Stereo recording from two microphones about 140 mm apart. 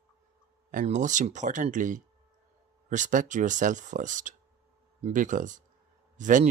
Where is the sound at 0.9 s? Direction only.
60° right (ahead or behind).